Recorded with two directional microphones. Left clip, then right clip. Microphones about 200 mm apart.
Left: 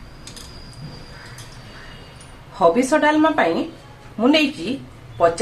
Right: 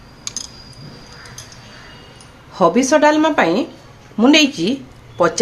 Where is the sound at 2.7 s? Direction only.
45° right (ahead or behind).